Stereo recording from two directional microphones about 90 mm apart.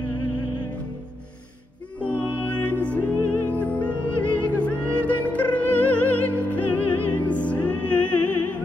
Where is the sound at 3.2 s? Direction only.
30° right (ahead or behind).